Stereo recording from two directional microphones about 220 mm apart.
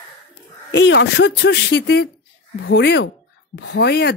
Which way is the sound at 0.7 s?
55° left (ahead or behind).